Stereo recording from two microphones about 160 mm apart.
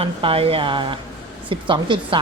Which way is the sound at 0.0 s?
35° right (ahead or behind).